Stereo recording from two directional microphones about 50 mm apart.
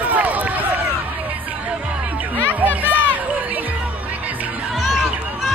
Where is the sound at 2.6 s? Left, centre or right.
Right.